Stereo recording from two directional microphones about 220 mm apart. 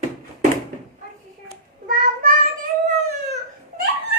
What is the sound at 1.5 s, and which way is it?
Child singing, 40° right (ahead or behind).